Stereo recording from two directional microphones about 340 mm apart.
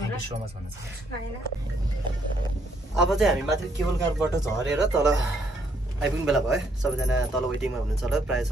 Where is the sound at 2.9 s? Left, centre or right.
Centre.